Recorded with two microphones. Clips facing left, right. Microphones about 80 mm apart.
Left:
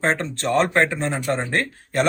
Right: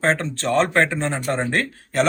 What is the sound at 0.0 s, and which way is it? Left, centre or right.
Speech, centre.